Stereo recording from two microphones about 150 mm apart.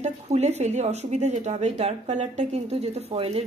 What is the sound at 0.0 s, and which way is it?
Speech, 45° right (ahead or behind).